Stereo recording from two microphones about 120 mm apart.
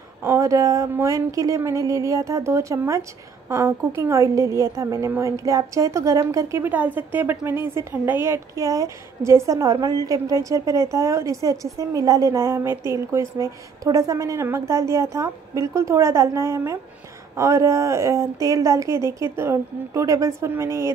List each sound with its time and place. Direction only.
0.2 s a woman's voice: 25° right (ahead or behind)
6.6 s a woman's voice: 15° right (ahead or behind)